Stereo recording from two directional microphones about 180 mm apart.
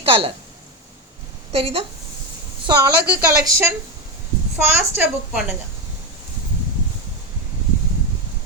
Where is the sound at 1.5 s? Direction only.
35° right (ahead or behind).